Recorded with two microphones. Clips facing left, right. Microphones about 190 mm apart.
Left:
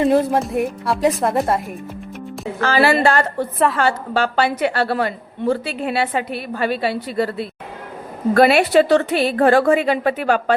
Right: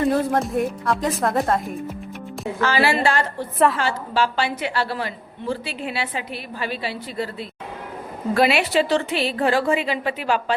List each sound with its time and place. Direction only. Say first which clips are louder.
0.0 s music: left 4 dB; 20° left (ahead or behind)
0.5 s speech: left 2 dB; 10° left (ahead or behind)
2.6 s a woman's voice: left 4 dB; 45° left (ahead or behind)
8.3 s a woman's voice: left 5 dB; 50° left (ahead or behind)
8.6 s a woman's voice: left 6 dB; 60° left (ahead or behind)
9.0 s a woman's voice: left 6 dB; 45° left (ahead or behind)